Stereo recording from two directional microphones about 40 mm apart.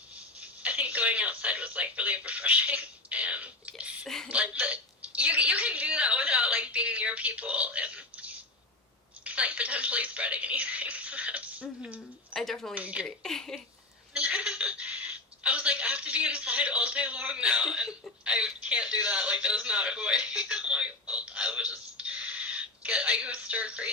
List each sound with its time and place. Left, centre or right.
0.3 s a woman's voice: right
12.3 s speech: centre
12.7 s a woman's voice: right
13.1 s speech: centre
14.1 s a sound: right
18.3 s speech: right